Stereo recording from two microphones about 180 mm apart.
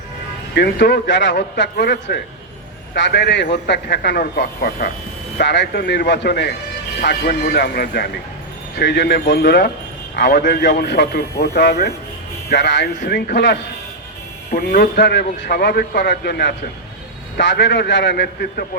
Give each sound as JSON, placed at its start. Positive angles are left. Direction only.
{"t": 0.5, "sound": "a man's voice", "side_deg": 65}
{"t": 5.4, "sound": "a man's voice", "side_deg": 70}
{"t": 12.5, "sound": "a man's voice", "side_deg": 75}
{"t": 17.3, "sound": "a man's voice", "side_deg": 80}